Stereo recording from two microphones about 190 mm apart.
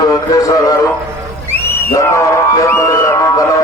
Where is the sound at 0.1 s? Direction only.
15° left (ahead or behind).